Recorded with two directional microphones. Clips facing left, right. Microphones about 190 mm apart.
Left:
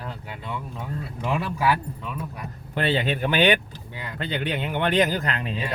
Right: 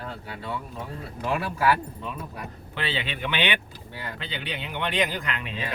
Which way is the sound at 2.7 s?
45° left (ahead or behind).